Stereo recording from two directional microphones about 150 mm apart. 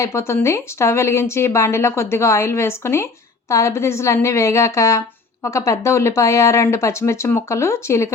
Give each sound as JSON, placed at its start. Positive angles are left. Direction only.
{"t": 0.0, "sound": "a woman's voice", "side_deg": 20}